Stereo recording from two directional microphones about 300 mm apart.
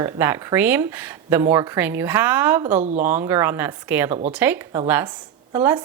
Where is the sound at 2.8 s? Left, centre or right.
Right.